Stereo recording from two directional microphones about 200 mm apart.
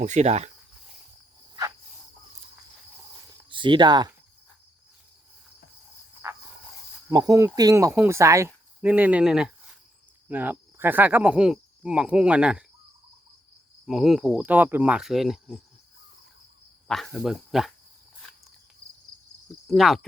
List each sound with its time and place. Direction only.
0.0 s speech: 35° right (ahead or behind)
3.1 s a sound: 25° right (ahead or behind)
7.1 s speech: 20° right (ahead or behind)
13.8 s speech: centre (ahead or behind)
16.9 s speech: centre (ahead or behind)
19.6 s speech: centre (ahead or behind)